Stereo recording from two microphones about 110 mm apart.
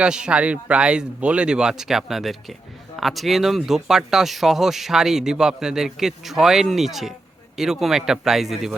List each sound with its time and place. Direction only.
0.0 s speech: 10° right (ahead or behind)